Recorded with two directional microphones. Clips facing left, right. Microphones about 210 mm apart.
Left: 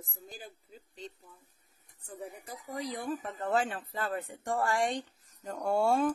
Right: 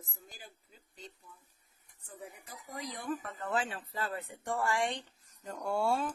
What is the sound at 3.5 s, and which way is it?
Speech, 45° left (ahead or behind).